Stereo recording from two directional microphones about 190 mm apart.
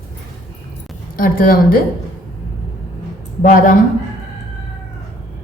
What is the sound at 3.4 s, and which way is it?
Speech, 40° left (ahead or behind).